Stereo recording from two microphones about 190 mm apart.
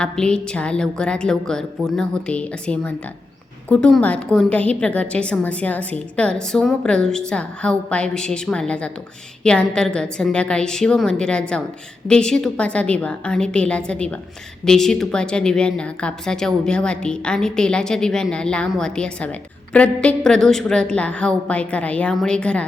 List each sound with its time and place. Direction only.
0.0 s a woman's voice: 5° left (ahead or behind)